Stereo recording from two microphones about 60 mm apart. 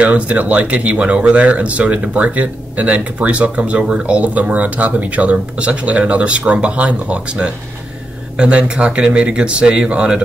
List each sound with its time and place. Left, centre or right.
0.0 s speech: right